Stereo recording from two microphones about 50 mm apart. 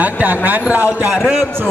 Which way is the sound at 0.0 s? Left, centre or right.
Right.